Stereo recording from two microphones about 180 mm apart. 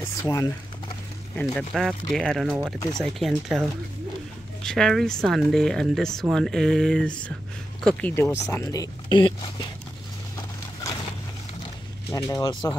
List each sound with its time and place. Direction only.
0.0 s speech: 15° left (ahead or behind)
1.4 s speech: centre (ahead or behind)
4.6 s speech: centre (ahead or behind); by 9.5 s 25° left (ahead or behind)
12.1 s speech: 20° left (ahead or behind)